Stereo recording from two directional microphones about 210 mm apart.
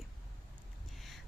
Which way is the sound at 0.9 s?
Centre (ahead or behind).